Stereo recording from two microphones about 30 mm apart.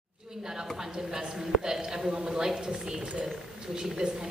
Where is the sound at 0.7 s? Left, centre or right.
Right.